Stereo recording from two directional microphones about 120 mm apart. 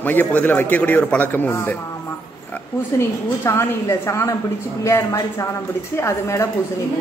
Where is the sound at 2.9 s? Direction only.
20° left (ahead or behind).